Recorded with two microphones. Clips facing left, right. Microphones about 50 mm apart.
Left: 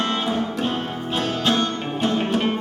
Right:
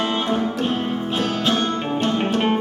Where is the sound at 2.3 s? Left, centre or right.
Centre.